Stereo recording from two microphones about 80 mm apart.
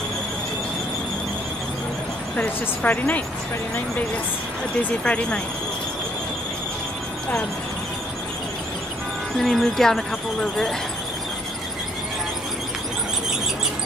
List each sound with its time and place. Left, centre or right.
2.3 s speech: centre
5.0 s speech: centre
9.4 s speech: centre